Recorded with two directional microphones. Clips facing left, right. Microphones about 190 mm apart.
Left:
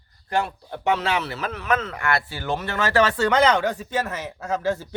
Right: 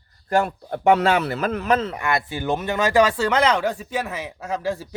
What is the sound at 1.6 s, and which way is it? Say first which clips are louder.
Speech: right 2 dB; 35° right (ahead or behind).